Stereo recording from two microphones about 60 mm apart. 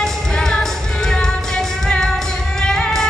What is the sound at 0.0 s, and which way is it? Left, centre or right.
Music, centre.